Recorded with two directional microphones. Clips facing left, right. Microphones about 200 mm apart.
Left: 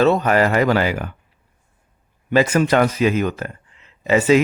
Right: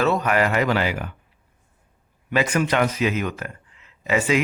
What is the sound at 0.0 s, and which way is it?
Speech, 30° left (ahead or behind).